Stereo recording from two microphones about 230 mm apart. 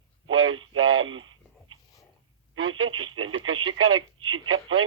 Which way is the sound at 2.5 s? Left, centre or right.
Right.